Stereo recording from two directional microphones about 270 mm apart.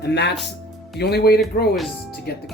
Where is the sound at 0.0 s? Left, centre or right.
Left.